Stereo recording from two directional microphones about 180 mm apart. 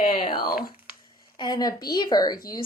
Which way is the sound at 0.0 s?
30° left (ahead or behind).